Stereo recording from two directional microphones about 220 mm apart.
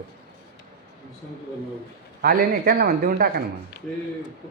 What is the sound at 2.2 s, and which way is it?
A man's voice, 45° right (ahead or behind).